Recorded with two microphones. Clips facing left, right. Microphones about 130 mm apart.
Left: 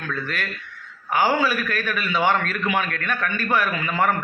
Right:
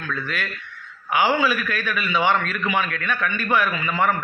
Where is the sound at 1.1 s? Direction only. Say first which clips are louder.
Even; 40° left (ahead or behind).